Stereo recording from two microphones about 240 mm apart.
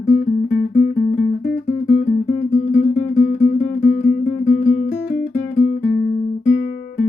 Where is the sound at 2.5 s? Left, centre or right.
Left.